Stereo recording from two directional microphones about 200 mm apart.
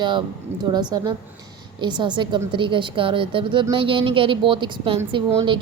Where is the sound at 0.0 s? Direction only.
25° right (ahead or behind).